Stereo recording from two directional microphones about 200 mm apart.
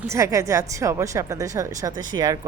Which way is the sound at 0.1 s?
15° right (ahead or behind).